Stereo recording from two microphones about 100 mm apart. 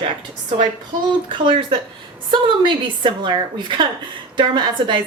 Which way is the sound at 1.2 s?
55° right (ahead or behind).